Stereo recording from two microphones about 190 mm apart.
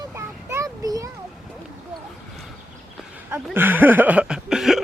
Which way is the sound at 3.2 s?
10° right (ahead or behind).